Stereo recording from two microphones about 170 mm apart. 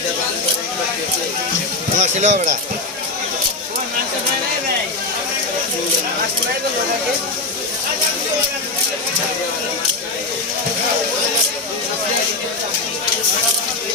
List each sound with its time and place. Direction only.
2.0 s speech: 45° right (ahead or behind)